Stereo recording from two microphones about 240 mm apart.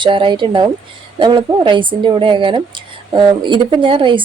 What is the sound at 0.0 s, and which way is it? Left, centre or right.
A woman's voice, centre.